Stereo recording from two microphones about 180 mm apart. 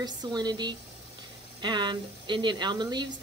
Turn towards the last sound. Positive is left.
turn(degrees=-25)  # may be behind; listen again after turning